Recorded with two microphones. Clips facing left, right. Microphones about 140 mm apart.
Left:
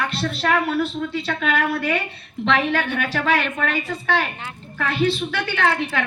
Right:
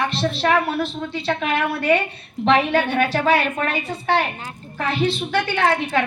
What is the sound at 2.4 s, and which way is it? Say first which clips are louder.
A woman's voice: right 3 dB; 35° right (ahead or behind).